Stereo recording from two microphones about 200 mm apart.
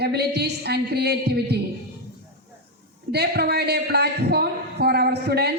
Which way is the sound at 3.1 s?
55° right (ahead or behind).